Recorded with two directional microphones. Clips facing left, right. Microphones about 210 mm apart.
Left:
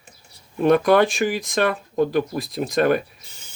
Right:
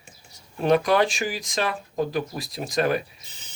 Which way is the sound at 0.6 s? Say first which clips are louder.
Left 4 dB; 55° left (ahead or behind).